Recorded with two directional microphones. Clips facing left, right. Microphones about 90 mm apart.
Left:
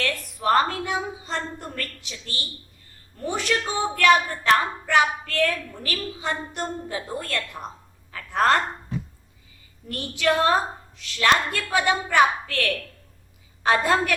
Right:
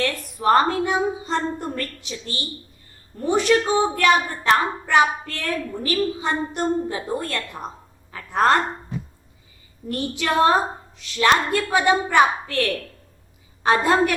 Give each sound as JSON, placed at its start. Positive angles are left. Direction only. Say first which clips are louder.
{"t": 0.0, "sound": "a woman's voice", "louder": "right 4 dB", "side_deg": -25}
{"t": 9.9, "sound": "a woman's voice", "louder": "right 1 dB", "side_deg": -25}